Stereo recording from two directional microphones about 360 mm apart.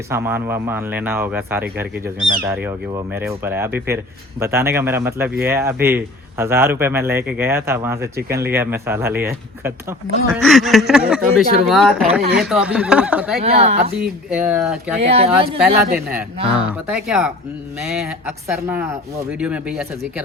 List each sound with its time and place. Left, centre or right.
0.1 s speech: centre
13.4 s speech: centre
14.3 s speech: centre
14.9 s speech: centre
16.0 s speech: centre
18.4 s speech: centre